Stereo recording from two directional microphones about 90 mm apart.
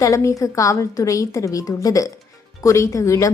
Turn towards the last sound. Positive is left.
turn(degrees=35)  # may be behind; listen again after turning